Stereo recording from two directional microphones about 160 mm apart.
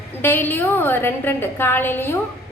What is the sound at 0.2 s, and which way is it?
A woman's voice, 15° left (ahead or behind).